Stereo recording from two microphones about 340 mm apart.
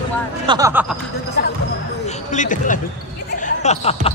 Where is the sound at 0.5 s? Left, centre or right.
Centre.